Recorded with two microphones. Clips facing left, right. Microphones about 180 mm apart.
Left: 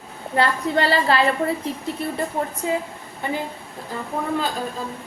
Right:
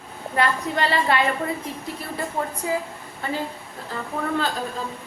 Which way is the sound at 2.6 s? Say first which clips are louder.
Left 2 dB; 25° left (ahead or behind).